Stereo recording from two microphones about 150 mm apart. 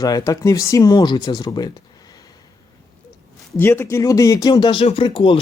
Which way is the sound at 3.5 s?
15° left (ahead or behind).